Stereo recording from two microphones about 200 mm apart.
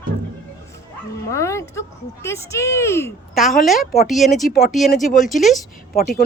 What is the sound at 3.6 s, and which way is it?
Speech, centre (ahead or behind).